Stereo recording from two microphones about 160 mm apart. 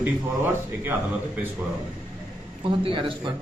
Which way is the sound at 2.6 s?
30° right (ahead or behind).